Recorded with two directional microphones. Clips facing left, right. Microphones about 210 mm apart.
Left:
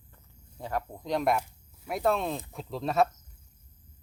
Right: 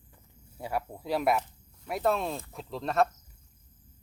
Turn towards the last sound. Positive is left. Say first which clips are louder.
# left 1 dB
turn(degrees=0)  # may be behind; listen again after turning